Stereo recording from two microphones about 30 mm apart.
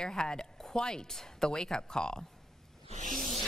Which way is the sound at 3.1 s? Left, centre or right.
Centre.